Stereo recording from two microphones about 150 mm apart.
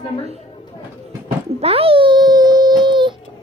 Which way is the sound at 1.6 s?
40° right (ahead or behind).